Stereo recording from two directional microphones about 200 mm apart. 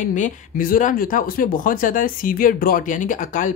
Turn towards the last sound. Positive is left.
turn(degrees=40)  # may be behind; listen again after turning